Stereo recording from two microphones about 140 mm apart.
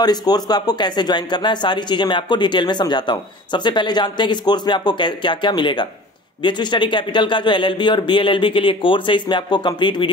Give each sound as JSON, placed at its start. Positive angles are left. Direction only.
{"t": 0.0, "sound": "speech", "side_deg": 30}